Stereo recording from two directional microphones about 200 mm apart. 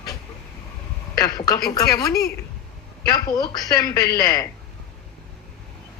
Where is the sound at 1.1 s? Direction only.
20° left (ahead or behind).